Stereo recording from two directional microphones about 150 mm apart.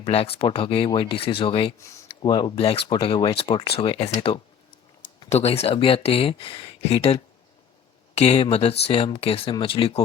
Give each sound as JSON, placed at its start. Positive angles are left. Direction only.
{"t": 0.0, "sound": "speech", "side_deg": 40}